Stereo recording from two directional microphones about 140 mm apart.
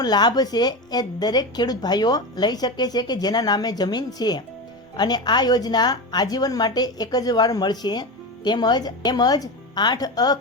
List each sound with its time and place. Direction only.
0.0 s a woman's voice: 30° left (ahead or behind)